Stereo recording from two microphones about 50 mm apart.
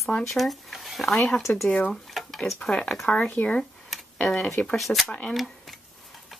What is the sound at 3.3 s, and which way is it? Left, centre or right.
Speech, left.